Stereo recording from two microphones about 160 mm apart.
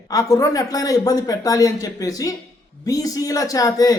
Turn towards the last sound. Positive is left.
turn(degrees=20)  # may be behind; listen again after turning